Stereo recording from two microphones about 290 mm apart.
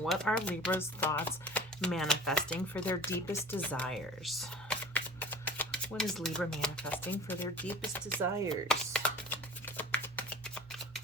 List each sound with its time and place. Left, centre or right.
0.0 s speech: centre
8.6 s shuffling cards: centre